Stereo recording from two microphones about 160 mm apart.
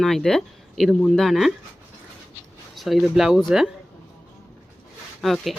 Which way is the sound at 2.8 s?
Centre (ahead or behind).